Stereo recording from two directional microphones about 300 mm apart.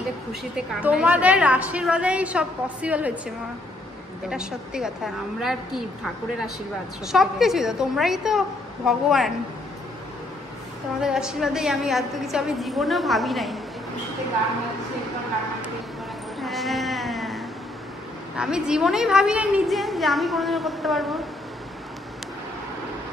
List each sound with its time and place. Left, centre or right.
0.8 s a woman's voice: centre
4.3 s a woman's voice: centre
7.1 s a woman's voice: centre
11.0 s a woman's voice: centre
16.3 s bleat: centre
18.3 s a woman's voice: centre